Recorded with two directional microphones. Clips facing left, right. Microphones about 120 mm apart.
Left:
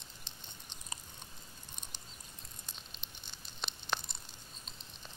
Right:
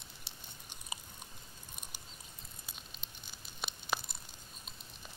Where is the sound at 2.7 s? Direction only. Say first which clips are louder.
Even; 5° right (ahead or behind).